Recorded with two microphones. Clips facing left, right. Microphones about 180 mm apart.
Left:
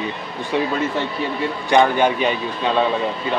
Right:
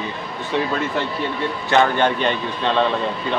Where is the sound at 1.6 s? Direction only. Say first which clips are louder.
Left 2 dB; 10° left (ahead or behind).